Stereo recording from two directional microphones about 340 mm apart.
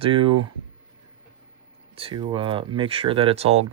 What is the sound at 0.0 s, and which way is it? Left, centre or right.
Speech, centre.